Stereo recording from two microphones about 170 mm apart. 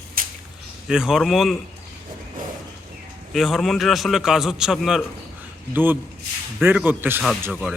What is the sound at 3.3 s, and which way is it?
Speech, centre (ahead or behind).